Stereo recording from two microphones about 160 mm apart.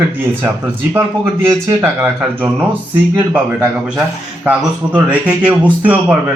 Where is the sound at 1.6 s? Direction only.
15° right (ahead or behind).